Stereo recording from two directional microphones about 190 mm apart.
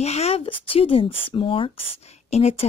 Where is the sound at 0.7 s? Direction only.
30° left (ahead or behind).